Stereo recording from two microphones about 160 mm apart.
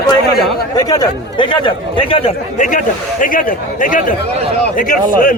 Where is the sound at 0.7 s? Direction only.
25° left (ahead or behind).